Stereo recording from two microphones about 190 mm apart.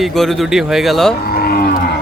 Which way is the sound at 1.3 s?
50° left (ahead or behind).